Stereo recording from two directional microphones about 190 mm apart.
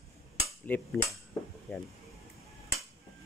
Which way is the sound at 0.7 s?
10° left (ahead or behind).